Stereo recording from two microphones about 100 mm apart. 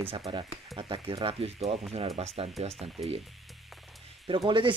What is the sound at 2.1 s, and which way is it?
Speech, 85° right.